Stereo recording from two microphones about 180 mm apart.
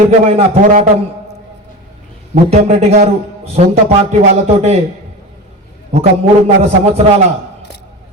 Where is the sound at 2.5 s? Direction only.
35° right (ahead or behind).